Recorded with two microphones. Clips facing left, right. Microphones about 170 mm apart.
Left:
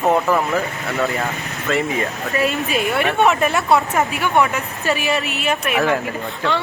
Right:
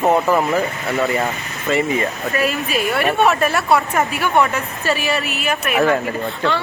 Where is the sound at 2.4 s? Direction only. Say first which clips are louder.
Left 1 dB; 20° left (ahead or behind).